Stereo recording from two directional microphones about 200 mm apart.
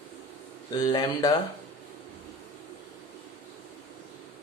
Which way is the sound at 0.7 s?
20° left (ahead or behind).